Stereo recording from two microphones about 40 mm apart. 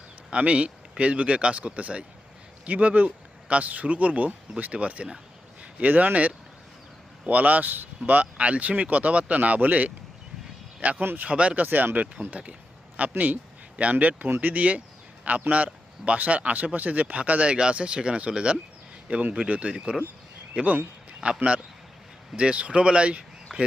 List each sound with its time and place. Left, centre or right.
0.3 s speech: right
7.3 s speech: right
11.6 s speech: right
12.1 s a man's voice: right
17.5 s speech: right
19.1 s speech: right
19.5 s speech: right
23.5 s a sound: centre